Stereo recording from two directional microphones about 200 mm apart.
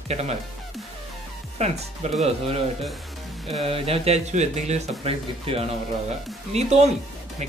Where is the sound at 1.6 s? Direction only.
35° right (ahead or behind).